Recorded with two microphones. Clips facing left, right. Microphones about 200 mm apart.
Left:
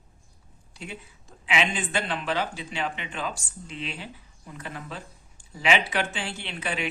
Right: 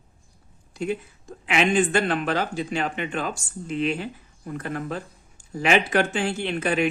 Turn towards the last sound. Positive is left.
turn(degrees=-45)  # may be behind; listen again after turning